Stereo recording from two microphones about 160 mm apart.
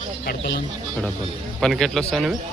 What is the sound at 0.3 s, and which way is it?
Speech, 90° left.